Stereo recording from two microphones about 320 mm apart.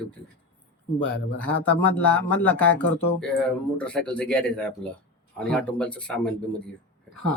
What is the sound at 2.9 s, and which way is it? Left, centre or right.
Speech, left.